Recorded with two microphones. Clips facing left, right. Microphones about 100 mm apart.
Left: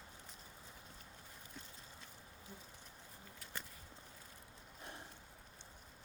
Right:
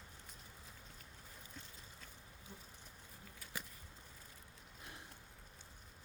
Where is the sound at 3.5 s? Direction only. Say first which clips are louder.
Right 1 dB; 5° right (ahead or behind).